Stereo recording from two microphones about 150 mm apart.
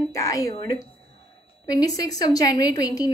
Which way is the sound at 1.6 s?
25° left (ahead or behind).